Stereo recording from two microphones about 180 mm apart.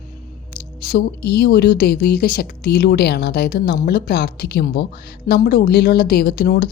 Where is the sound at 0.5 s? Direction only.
60° left (ahead or behind).